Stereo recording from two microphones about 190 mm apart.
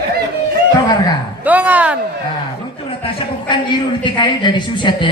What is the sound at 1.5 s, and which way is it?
Speech, 10° right (ahead or behind).